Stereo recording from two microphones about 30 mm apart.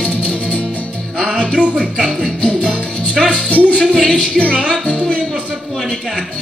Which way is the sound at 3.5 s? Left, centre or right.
Left.